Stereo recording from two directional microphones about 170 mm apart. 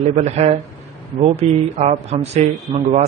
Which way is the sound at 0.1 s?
40° right (ahead or behind).